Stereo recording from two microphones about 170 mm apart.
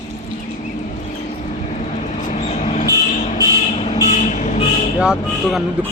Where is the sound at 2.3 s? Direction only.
40° left (ahead or behind).